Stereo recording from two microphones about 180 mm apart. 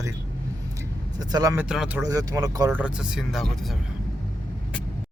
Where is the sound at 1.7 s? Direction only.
5° right (ahead or behind).